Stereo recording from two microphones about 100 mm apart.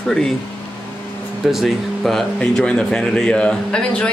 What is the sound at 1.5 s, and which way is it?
Speech, centre (ahead or behind).